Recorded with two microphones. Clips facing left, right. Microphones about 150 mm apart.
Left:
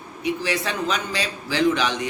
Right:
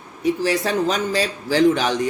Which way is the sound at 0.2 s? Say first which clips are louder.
Right 5 dB; 40° right (ahead or behind).